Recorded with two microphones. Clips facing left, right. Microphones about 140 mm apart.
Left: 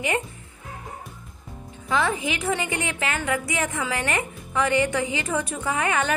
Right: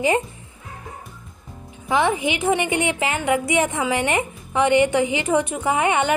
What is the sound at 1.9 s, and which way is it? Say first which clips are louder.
Speech: right 4 dB; 25° right (ahead or behind).